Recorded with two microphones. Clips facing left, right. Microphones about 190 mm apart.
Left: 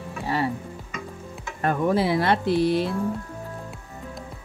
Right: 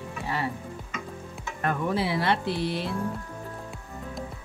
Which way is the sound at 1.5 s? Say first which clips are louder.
Left 5 dB; 40° left (ahead or behind).